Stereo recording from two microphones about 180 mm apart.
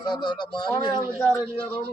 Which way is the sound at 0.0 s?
25° left (ahead or behind).